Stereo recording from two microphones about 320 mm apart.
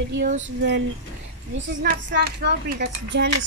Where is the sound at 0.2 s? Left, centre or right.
Right.